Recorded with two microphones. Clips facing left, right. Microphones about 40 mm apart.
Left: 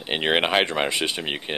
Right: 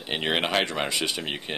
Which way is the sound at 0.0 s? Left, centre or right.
Left.